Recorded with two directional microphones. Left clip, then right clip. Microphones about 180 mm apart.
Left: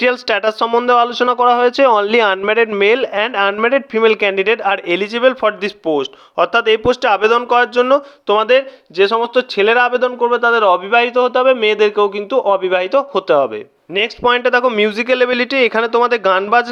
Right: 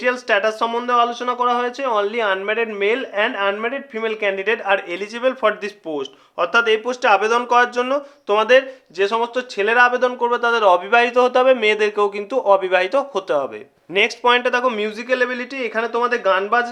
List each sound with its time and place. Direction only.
0.0 s speech: 40° left (ahead or behind)
0.9 s speech: 50° left (ahead or behind); by 10.1 s 30° left (ahead or behind)
10.1 s speech: 20° left (ahead or behind)
13.9 s speech: 15° left (ahead or behind); by 16.6 s 45° left (ahead or behind)